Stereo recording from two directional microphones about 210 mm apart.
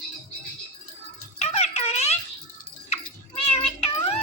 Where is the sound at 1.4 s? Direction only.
30° left (ahead or behind).